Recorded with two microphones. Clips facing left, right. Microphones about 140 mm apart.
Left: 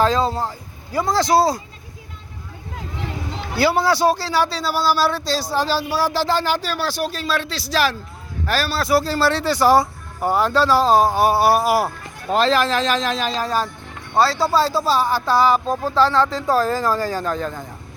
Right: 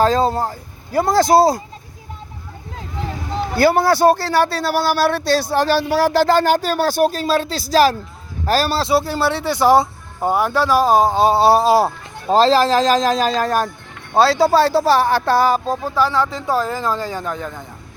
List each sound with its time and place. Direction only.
0.0 s a man's voice: 50° right (ahead or behind)
3.3 s a man's voice: 50° right (ahead or behind)
14.2 s speech: 75° right (ahead or behind); by 15.6 s 50° right (ahead or behind)
15.7 s speech: 15° right (ahead or behind)